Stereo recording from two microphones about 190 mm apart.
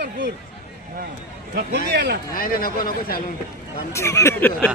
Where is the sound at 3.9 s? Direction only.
15° left (ahead or behind).